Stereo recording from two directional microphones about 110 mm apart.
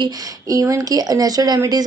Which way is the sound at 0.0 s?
35° right (ahead or behind).